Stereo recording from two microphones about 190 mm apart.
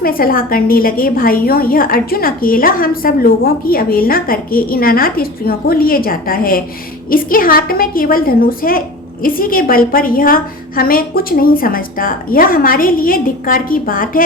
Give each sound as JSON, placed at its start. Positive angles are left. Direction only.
{"t": 0.0, "sound": "a woman's voice", "side_deg": 50}